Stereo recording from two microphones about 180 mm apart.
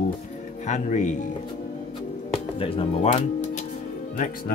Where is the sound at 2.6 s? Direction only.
30° left (ahead or behind).